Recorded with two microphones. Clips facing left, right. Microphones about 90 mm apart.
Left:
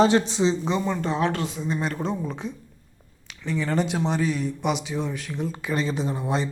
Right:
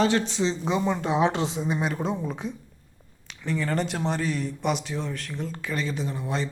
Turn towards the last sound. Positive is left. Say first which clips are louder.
# left 3 dB
turn(degrees=20)  # may be behind; listen again after turning